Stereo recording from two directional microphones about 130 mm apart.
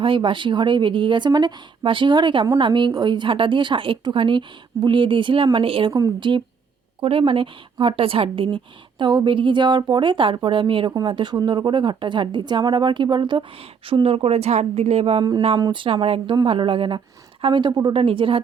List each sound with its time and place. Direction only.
0.0 s speech: 40° right (ahead or behind)
5.9 s a woman's voice: 30° right (ahead or behind); by 15.2 s 50° right (ahead or behind)
15.5 s a woman's voice: 35° right (ahead or behind)